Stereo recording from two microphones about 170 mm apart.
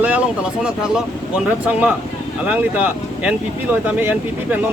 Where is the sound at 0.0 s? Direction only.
5° right (ahead or behind).